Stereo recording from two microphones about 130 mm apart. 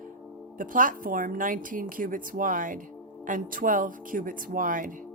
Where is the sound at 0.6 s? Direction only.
90° right.